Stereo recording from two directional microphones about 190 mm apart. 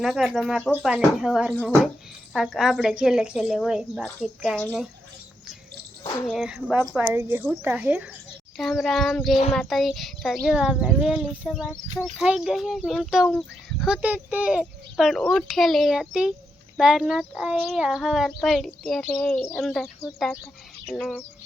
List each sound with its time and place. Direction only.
0.0 s speech: centre (ahead or behind)
6.2 s speech: centre (ahead or behind)